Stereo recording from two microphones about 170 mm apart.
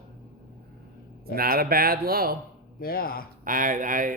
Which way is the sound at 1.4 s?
60° right (ahead or behind).